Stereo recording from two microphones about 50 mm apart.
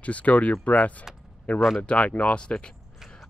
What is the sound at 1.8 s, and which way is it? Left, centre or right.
Speech, left.